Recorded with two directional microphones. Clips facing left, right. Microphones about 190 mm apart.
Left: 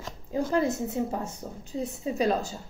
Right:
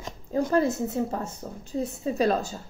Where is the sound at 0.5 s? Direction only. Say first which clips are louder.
Right 2 dB; 15° left (ahead or behind).